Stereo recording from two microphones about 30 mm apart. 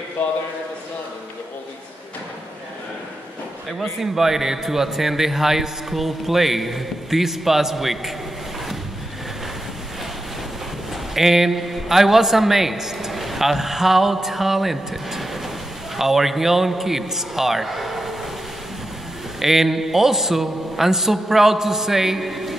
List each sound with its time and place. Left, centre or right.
0.2 s a man's voice: left
3.7 s a man's voice: centre
11.1 s a man's voice: centre
19.4 s a man's voice: centre